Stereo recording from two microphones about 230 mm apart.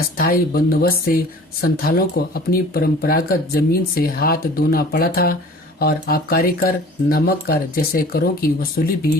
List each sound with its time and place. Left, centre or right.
0.2 s speech: left